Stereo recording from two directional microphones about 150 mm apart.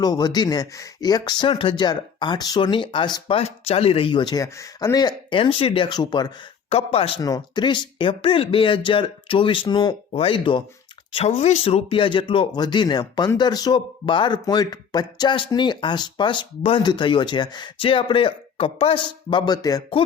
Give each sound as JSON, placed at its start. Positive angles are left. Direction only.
{"t": 0.0, "sound": "speech", "side_deg": 25}
{"t": 6.7, "sound": "speech", "side_deg": 40}
{"t": 7.2, "sound": "speech", "side_deg": 25}